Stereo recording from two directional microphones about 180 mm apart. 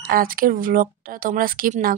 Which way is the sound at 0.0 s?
55° right (ahead or behind).